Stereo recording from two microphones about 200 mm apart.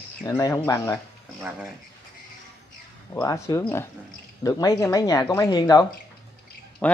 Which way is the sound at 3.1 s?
15° left (ahead or behind).